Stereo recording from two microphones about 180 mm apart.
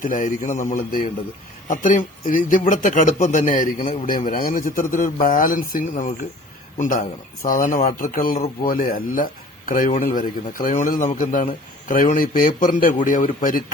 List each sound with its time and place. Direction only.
0.0 s speech: 45° left (ahead or behind)
7.4 s speech: 50° left (ahead or behind)